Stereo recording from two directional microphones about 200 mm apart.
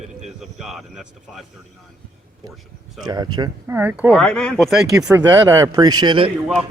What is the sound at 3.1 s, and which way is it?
Speech, 20° right (ahead or behind).